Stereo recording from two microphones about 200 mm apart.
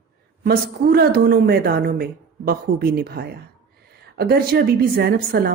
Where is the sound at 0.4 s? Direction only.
50° right (ahead or behind).